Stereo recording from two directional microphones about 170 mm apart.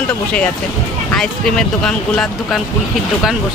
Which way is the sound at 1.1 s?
5° left (ahead or behind).